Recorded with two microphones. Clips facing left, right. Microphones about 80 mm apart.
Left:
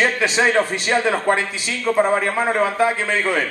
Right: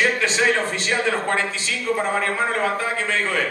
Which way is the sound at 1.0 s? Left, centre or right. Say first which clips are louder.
Left 3 dB; centre.